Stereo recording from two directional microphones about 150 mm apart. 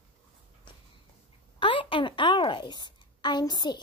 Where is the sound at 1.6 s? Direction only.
35° left (ahead or behind).